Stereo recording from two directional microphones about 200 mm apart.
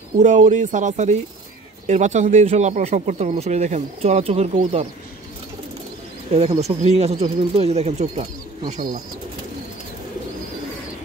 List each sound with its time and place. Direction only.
0.2 s speech: 40° right (ahead or behind)
6.3 s speech: 30° right (ahead or behind)